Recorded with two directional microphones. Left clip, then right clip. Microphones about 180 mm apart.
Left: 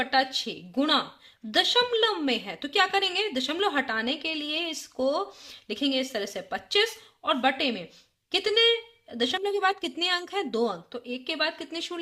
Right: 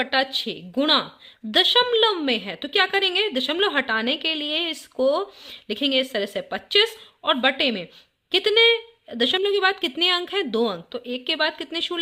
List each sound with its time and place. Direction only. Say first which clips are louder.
0.0 s a woman's voice: right 3 dB; 25° right (ahead or behind)